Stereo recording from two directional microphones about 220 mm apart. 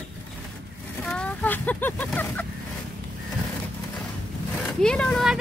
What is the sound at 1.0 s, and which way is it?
Speech, 5° left (ahead or behind).